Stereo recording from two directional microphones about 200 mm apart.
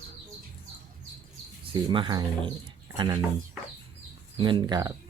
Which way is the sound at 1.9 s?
25° right (ahead or behind).